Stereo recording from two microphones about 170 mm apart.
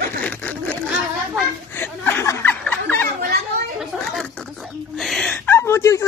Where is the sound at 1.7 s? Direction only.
15° left (ahead or behind).